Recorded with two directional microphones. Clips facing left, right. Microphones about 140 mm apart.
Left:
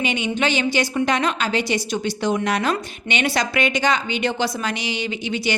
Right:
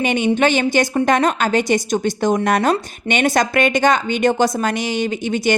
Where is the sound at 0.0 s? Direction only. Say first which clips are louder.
Right 6 dB; 50° right (ahead or behind).